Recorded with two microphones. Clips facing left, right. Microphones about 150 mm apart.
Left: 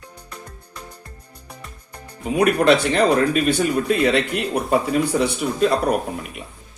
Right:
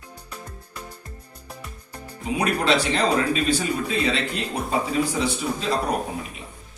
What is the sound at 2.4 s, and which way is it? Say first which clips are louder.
Speech: left 6 dB; 60° left (ahead or behind).